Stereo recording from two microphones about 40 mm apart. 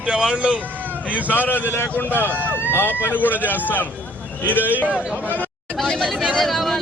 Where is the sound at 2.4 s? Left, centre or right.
Right.